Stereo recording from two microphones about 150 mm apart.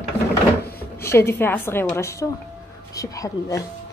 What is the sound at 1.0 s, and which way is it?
A woman's voice, 15° left (ahead or behind).